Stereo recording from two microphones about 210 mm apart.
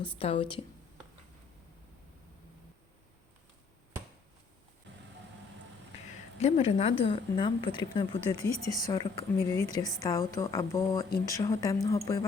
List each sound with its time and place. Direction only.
0.2 s speech: 25° left (ahead or behind)
6.4 s speech: 30° left (ahead or behind)